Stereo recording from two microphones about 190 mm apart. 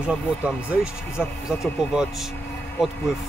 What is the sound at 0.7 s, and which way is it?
Speech, 5° right (ahead or behind).